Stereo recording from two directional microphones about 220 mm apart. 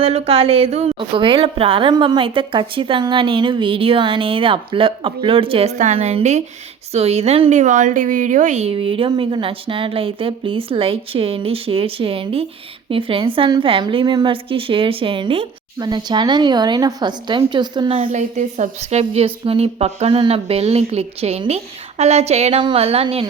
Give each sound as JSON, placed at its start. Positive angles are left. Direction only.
{"t": 0.0, "sound": "a woman's voice", "side_deg": -25}